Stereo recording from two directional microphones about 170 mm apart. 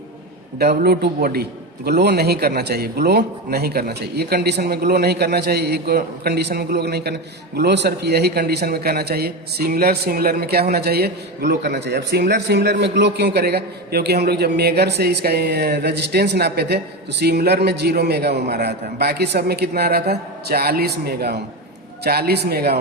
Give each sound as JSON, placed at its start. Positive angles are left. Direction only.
{"t": 0.6, "sound": "a man's voice", "side_deg": -70}